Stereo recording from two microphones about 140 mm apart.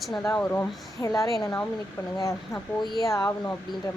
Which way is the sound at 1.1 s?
25° left (ahead or behind).